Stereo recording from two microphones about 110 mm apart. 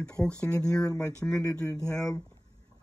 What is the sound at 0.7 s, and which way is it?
Speech, 5° left (ahead or behind).